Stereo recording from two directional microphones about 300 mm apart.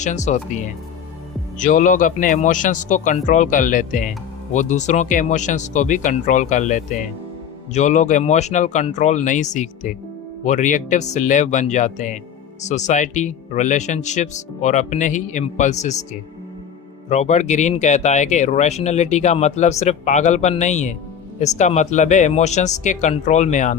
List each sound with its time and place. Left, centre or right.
0.0 s speech: left
17.1 s speech: left